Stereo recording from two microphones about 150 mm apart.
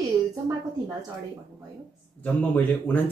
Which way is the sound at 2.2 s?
10° left (ahead or behind).